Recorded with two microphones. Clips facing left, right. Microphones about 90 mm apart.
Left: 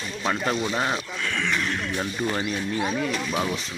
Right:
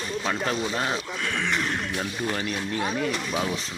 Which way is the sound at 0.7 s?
5° left (ahead or behind).